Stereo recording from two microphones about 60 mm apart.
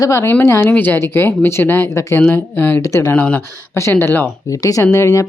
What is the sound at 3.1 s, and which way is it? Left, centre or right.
Speech, left.